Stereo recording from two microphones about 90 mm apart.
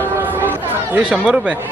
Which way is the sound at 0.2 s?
20° right (ahead or behind).